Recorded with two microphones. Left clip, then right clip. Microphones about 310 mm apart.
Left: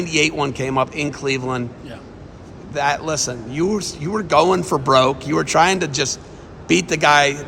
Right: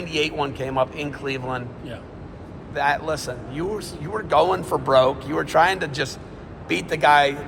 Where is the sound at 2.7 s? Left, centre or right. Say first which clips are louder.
Left 2 dB; left.